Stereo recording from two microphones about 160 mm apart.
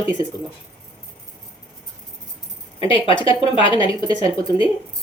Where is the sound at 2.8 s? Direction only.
35° left (ahead or behind).